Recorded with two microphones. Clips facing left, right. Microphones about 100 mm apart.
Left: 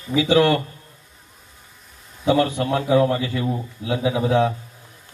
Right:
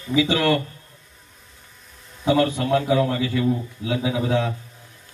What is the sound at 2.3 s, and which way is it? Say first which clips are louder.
A man's voice: even; 25° left (ahead or behind).